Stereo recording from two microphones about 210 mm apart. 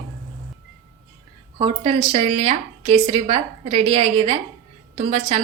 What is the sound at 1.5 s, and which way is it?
A woman's voice, 25° right (ahead or behind).